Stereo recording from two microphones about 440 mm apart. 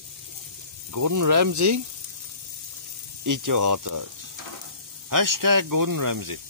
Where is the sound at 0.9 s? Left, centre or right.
Right.